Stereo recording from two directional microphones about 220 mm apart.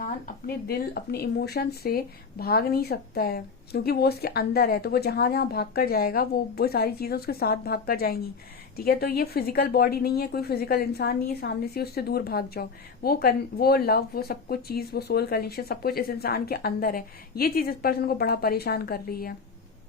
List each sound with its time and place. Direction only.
0.4 s speech: 45° left (ahead or behind)